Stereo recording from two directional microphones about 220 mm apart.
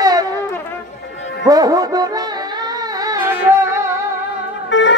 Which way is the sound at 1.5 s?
15° right (ahead or behind).